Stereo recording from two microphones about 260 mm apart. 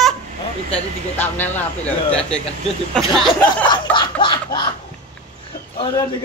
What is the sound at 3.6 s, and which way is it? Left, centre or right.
A man's voice, centre.